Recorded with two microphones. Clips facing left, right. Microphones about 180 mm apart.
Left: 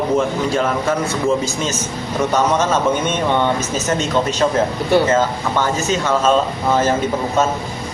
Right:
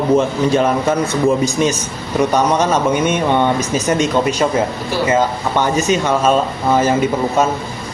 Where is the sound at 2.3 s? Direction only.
10° right (ahead or behind).